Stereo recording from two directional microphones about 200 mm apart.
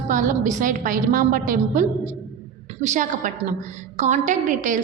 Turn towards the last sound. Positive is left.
turn(degrees=-40)  # may be behind; listen again after turning